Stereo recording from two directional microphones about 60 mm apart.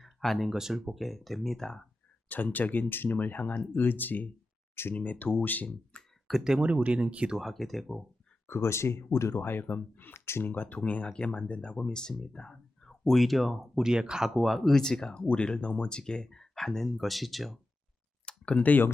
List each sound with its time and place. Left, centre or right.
0.0 s speech: centre
2.3 s speech: left
4.7 s speech: left
4.9 s speech: left
6.0 s clicking: centre
6.6 s speech: right
7.3 s speech: centre
8.4 s speech: left
9.4 s speech: left
10.5 s speech: left
10.8 s speech: centre
14.3 s speech: centre
18.3 s speech: centre